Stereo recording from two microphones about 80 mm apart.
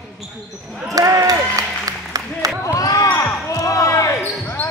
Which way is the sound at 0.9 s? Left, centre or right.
Right.